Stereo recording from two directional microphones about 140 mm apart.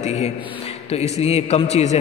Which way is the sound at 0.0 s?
55° left (ahead or behind).